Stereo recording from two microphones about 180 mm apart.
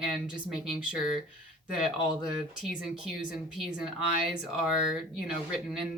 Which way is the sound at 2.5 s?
Centre (ahead or behind).